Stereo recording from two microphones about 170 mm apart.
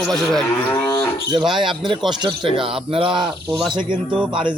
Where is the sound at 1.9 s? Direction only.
25° right (ahead or behind).